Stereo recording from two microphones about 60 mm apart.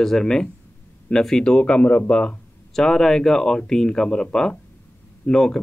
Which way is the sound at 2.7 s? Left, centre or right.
Centre.